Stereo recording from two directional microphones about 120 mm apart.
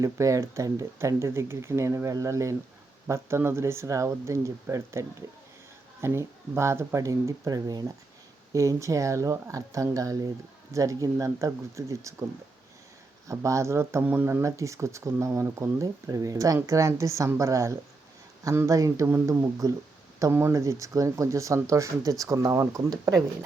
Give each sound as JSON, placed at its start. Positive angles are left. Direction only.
{"t": 0.0, "sound": "speech", "side_deg": -25}
{"t": 13.2, "sound": "speech", "side_deg": -25}